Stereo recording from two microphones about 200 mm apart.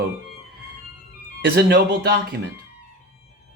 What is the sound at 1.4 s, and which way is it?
Speech, 55° right (ahead or behind).